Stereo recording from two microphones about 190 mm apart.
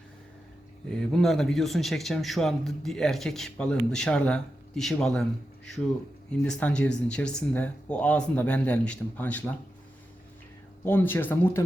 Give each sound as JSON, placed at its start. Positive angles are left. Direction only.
{"t": 0.9, "sound": "speech", "side_deg": 0}
{"t": 6.3, "sound": "speech", "side_deg": 5}
{"t": 10.8, "sound": "speech", "side_deg": 10}